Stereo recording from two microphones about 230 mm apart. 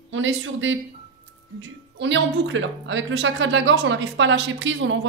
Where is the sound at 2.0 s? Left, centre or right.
Right.